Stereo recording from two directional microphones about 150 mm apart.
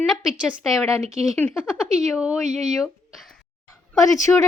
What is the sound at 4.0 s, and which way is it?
Speech, 20° left (ahead or behind).